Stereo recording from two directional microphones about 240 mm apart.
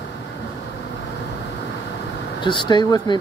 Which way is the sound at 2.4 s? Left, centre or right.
Centre.